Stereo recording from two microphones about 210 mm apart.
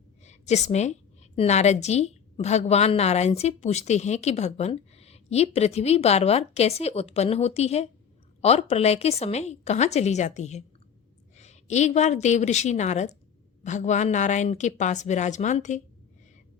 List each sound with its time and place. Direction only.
0.3 s a woman's voice: 30° left (ahead or behind)